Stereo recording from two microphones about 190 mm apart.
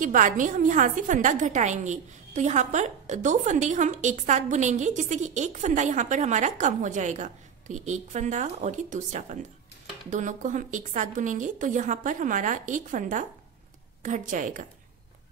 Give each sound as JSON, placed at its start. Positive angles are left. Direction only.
{"t": 0.0, "sound": "a woman's voice", "side_deg": -45}